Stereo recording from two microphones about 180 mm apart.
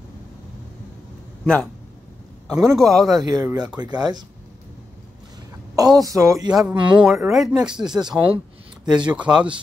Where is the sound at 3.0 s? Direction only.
20° right (ahead or behind).